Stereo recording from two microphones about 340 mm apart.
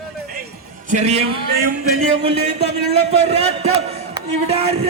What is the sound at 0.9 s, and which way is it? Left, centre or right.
Speech, centre.